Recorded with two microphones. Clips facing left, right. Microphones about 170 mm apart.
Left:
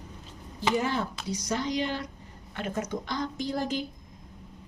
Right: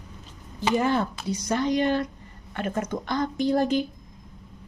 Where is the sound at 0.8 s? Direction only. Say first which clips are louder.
Right 6 dB; 55° right (ahead or behind).